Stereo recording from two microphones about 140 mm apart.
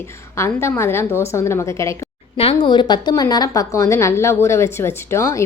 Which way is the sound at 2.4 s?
40° left (ahead or behind).